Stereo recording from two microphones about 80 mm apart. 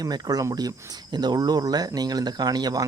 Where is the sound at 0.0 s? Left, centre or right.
Right.